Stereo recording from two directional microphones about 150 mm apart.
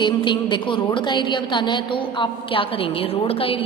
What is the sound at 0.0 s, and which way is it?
A woman's voice, 30° left (ahead or behind).